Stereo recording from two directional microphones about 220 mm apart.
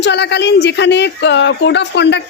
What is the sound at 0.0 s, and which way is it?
Speech, 50° left (ahead or behind).